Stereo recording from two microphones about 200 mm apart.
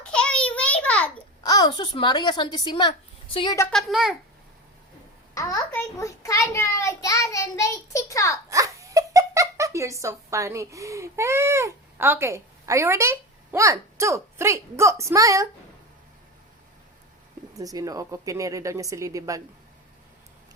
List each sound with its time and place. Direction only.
0.0 s a sound: 5° left (ahead or behind)
1.5 s a child's voice: 20° left (ahead or behind)
3.7 s a child's voice: centre (ahead or behind)
5.3 s a child's voice: 15° left (ahead or behind)
8.4 s speech: 15° right (ahead or behind)
17.6 s a woman's voice: 15° right (ahead or behind)